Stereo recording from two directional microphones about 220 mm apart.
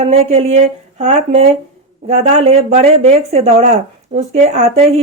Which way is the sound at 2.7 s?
30° right (ahead or behind).